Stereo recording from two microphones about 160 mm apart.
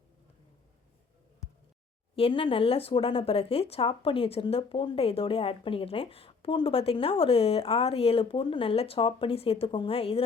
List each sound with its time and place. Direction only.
2.1 s speech: 35° left (ahead or behind)